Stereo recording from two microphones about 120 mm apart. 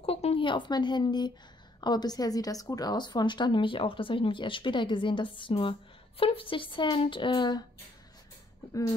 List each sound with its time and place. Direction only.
0.0 s a woman's voice: 55° left (ahead or behind); by 7.6 s 35° left (ahead or behind)